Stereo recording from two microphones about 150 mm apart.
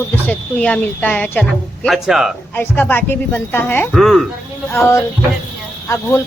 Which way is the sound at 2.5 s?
10° left (ahead or behind).